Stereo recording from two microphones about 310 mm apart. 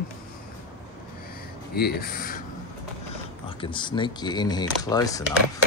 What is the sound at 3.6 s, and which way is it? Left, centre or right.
Speech, centre.